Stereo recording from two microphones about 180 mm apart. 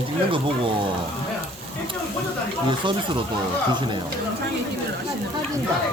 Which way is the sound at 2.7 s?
25° right (ahead or behind).